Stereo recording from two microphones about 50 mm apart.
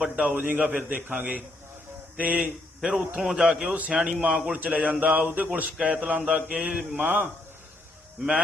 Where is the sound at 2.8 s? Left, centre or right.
Centre.